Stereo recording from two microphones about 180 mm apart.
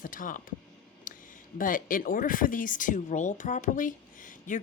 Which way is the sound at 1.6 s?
50° left (ahead or behind).